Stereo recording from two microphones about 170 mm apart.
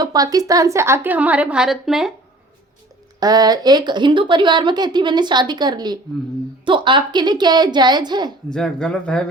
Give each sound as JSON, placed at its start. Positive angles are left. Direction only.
{"t": 0.0, "sound": "a woman's voice", "side_deg": -20}
{"t": 3.2, "sound": "a woman's voice", "side_deg": -25}
{"t": 8.5, "sound": "speech", "side_deg": 5}